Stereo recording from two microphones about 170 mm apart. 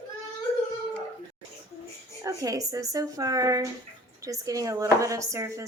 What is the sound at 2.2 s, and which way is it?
Speech, 20° right (ahead or behind).